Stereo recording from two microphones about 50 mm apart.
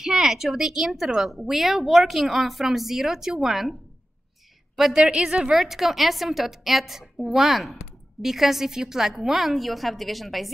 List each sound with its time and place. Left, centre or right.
0.0 s speech: centre
4.9 s a woman's voice: centre